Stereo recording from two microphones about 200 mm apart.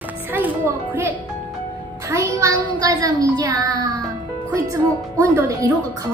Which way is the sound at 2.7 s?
20° right (ahead or behind).